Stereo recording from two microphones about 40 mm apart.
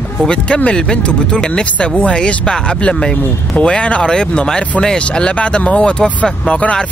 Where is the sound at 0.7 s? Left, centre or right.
Left.